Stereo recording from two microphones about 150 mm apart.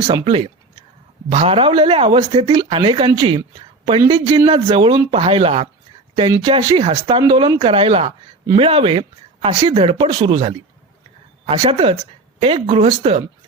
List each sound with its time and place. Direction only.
0.1 s speech: 40° right (ahead or behind)